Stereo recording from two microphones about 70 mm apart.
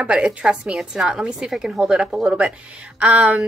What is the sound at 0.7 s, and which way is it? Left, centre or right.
A woman's voice, centre.